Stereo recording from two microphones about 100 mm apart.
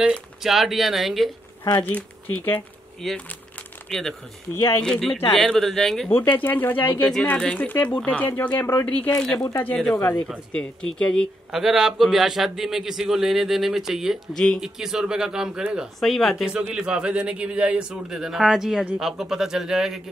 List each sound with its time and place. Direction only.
0.0 s a man's voice: 5° right (ahead or behind)
1.7 s speech: 15° left (ahead or behind)
3.0 s a man's voice: centre (ahead or behind)
4.6 s speech: 30° left (ahead or behind)
4.8 s a man's voice: 10° left (ahead or behind)
6.1 s speech: 20° left (ahead or behind)
9.4 s speech: 20° left (ahead or behind)
10.5 s speech: 10° left (ahead or behind)
11.5 s a man's voice: 5° right (ahead or behind)